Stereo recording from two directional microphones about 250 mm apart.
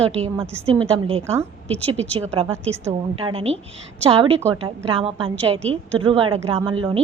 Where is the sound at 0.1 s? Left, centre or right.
Right.